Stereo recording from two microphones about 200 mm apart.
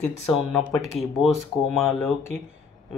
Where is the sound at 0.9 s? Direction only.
30° left (ahead or behind).